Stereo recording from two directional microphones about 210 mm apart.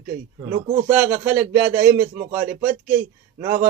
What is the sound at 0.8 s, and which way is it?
Speech, 5° right (ahead or behind).